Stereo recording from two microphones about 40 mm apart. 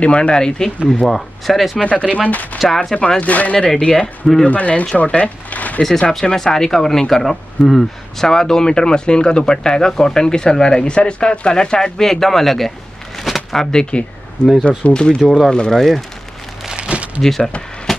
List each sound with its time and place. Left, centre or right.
0.0 s speech: left
1.0 s speech: centre
1.8 s speech: left
2.6 s speech: centre
3.2 s speech: left
3.5 s speech: left
4.5 s speech: left
5.8 s speech: centre
12.1 s speech: centre
13.2 s a sound: centre
13.7 s speech: left
16.7 s a sound: right
17.2 s speech: centre
17.9 s a sound: centre